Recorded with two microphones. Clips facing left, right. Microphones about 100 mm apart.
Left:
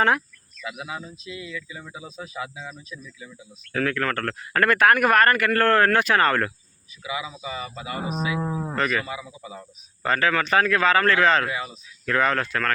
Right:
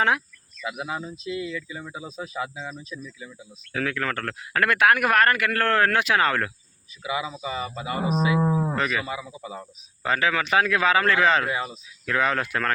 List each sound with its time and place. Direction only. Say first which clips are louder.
0.6 s speech: right 3 dB; 5° right (ahead or behind)
2.6 s speech: right 3 dB; 15° right (ahead or behind)
7.4 s speech: right 3 dB; 20° right (ahead or behind)
8.4 s speech: right 5 dB; 20° right (ahead or behind)
8.7 s speech: left 1 dB; 5° right (ahead or behind)